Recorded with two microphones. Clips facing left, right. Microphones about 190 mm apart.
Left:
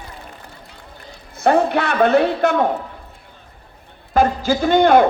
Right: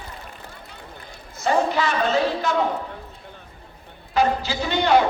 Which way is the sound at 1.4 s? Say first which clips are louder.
Left 5 dB; 60° left (ahead or behind).